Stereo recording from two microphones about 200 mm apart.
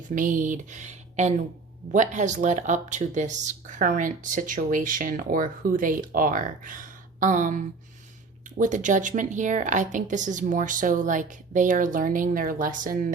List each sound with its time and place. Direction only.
0.1 s speech: 40° right (ahead or behind)